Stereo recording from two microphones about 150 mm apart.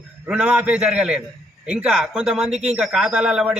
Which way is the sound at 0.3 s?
5° right (ahead or behind).